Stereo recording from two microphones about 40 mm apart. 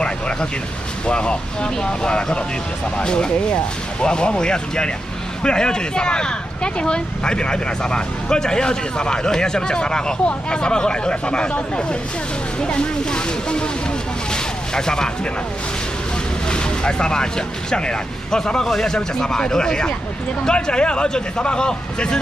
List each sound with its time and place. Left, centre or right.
1.0 s speech: left
14.3 s a sound: centre
16.4 s speech: left